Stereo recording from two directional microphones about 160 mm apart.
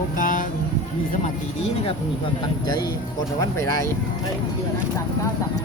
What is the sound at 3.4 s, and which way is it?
Speech, 20° left (ahead or behind).